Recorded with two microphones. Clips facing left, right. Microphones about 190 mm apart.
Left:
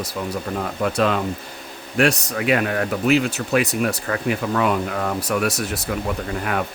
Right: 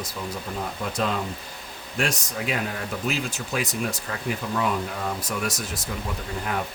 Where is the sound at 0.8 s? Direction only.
70° left (ahead or behind).